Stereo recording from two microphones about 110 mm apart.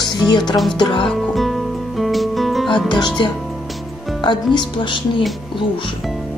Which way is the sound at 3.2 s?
45° left (ahead or behind).